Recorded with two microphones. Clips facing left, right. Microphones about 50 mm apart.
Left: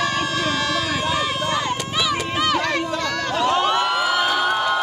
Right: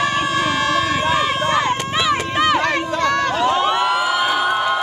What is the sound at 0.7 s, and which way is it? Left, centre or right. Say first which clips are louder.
Run: right 5 dB; right.